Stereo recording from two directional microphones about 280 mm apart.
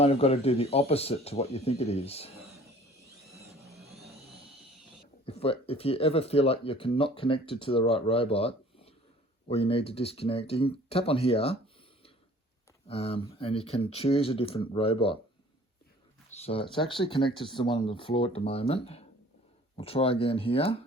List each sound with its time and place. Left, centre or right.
0.0 s speech: left
5.2 s speech: left
12.9 s speech: left
16.4 s speech: centre